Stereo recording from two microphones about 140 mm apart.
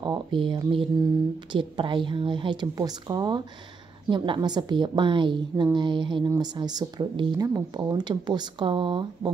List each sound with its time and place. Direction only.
0.0 s a woman's voice: 35° right (ahead or behind)